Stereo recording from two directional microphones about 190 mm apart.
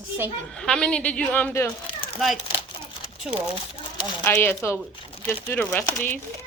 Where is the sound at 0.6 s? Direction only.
5° left (ahead or behind).